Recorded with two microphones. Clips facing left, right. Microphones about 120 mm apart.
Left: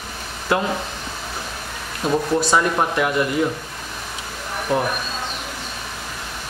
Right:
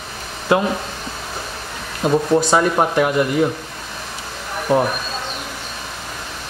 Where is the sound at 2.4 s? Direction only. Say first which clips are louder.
Right 3 dB; 20° right (ahead or behind).